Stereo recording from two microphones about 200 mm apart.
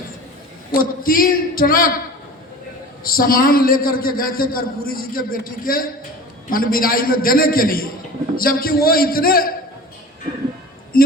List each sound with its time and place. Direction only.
0.7 s a man's voice: 45° left (ahead or behind)
3.0 s a man's voice: 45° left (ahead or behind)
10.9 s a man's voice: 45° left (ahead or behind)